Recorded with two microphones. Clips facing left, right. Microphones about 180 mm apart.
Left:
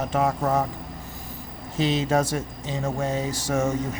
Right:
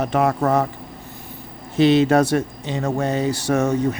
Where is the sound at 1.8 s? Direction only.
65° right (ahead or behind).